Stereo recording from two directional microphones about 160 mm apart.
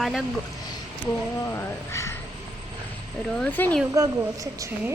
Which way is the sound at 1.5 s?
15° left (ahead or behind).